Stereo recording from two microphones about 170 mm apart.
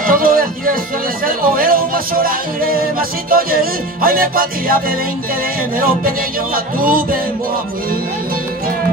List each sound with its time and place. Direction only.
0.0 s music: 55° right (ahead or behind)